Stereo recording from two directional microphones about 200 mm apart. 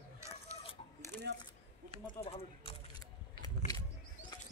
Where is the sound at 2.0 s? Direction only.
30° left (ahead or behind).